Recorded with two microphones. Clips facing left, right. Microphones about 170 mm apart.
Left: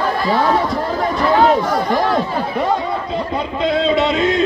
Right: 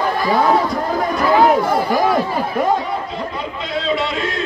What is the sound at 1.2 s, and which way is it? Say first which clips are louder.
Speech: even; 5° right (ahead or behind).